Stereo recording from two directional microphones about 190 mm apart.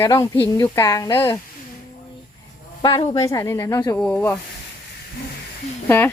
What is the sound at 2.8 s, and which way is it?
Sizzle, 25° left (ahead or behind).